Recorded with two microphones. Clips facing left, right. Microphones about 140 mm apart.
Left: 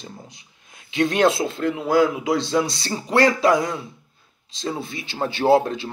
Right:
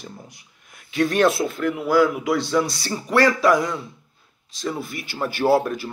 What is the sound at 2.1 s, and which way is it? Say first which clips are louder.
Speech: even; 25° left (ahead or behind).